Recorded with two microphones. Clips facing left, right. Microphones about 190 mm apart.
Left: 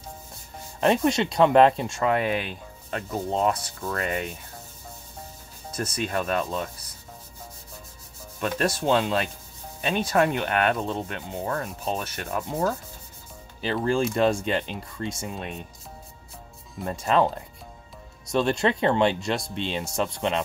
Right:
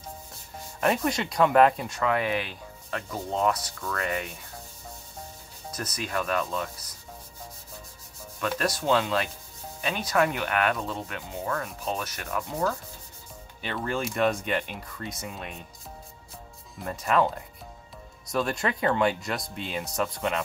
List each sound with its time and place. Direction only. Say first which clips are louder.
0.7 s speech: left 4 dB; 25° left (ahead or behind)
5.7 s speech: left 4 dB; 25° left (ahead or behind)
8.4 s speech: left 3 dB; 25° left (ahead or behind)
16.8 s speech: left 2 dB; 25° left (ahead or behind)